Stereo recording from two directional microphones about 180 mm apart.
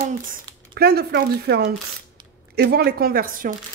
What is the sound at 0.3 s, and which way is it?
Speech, 60° right (ahead or behind).